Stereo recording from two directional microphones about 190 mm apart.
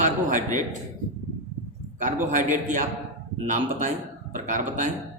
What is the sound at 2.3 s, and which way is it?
A man's voice, 40° right (ahead or behind).